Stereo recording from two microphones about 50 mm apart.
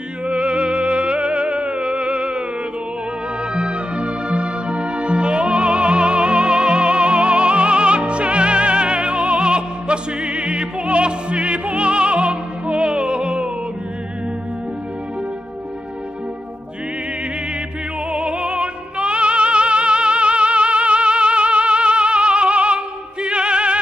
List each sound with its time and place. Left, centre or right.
0.3 s music: right
3.5 s music: right
18.1 s music: right